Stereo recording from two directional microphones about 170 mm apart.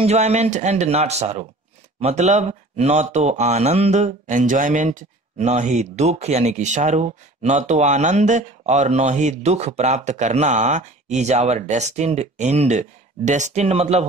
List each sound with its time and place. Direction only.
0.0 s speech: 40° right (ahead or behind)